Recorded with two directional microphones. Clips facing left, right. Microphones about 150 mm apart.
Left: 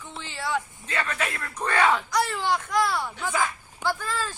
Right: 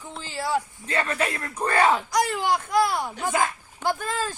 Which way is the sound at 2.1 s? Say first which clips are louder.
Right 2 dB; 15° right (ahead or behind).